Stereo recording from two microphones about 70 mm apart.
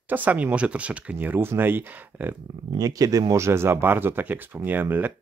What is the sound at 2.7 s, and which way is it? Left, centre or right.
Speech, right.